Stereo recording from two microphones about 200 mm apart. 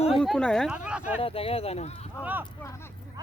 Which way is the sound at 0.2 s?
5° left (ahead or behind).